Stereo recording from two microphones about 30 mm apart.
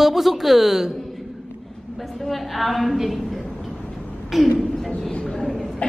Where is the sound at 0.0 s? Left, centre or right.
Centre.